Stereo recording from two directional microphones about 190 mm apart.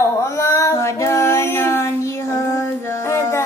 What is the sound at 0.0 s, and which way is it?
Music, 15° left (ahead or behind).